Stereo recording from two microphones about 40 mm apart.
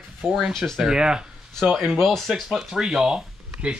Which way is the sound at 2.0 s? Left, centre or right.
Centre.